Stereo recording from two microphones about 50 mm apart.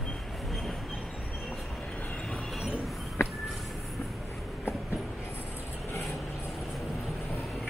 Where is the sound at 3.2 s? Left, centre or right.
Left.